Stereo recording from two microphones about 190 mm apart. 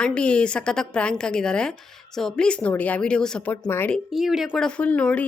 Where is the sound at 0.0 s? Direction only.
5° left (ahead or behind).